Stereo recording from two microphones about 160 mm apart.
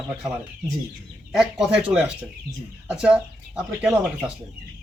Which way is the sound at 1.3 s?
5° right (ahead or behind).